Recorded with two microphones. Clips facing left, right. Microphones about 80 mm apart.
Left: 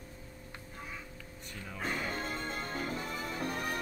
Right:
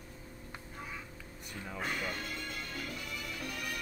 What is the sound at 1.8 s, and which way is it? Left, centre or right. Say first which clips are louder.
Music: left 2 dB; left.